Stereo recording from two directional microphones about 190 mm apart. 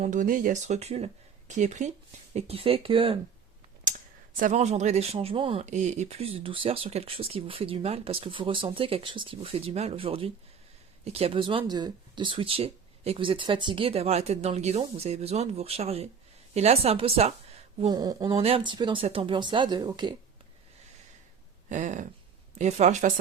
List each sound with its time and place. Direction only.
0.0 s speech: 40° right (ahead or behind)
4.4 s speech: 40° right (ahead or behind); by 20.1 s 25° right (ahead or behind)
21.7 s speech: 40° right (ahead or behind)